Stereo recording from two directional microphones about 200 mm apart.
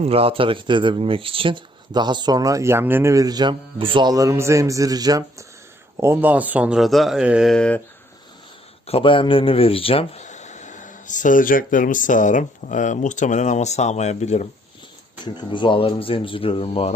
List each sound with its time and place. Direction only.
0.0 s speech: 30° right (ahead or behind); by 7.8 s 5° left (ahead or behind)
8.9 s speech: 25° left (ahead or behind)
15.2 s speech: 25° left (ahead or behind)